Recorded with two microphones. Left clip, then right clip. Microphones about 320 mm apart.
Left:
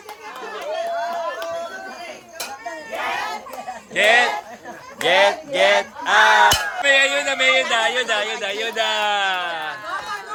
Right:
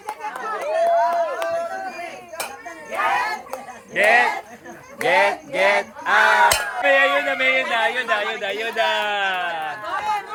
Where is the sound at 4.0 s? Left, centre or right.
Centre.